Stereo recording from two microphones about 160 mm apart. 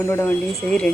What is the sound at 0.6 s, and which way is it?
Speech, 5° left (ahead or behind).